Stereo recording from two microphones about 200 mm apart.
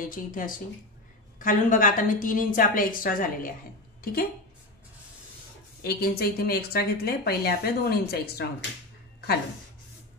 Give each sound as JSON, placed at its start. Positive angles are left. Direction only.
{"t": 0.0, "sound": "speech", "side_deg": 45}
{"t": 5.8, "sound": "speech", "side_deg": 50}